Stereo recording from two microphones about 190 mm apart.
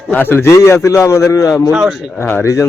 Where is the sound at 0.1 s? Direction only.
10° left (ahead or behind).